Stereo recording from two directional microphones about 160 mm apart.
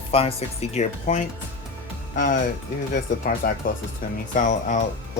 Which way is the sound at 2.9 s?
60° left (ahead or behind).